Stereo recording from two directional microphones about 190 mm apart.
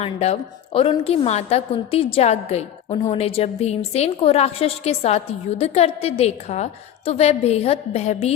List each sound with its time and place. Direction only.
0.0 s a woman's voice: 35° left (ahead or behind)